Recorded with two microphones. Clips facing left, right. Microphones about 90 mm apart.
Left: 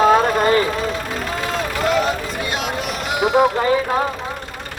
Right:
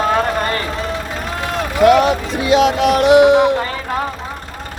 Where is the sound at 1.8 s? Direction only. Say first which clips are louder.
Right 9 dB; 75° right (ahead or behind).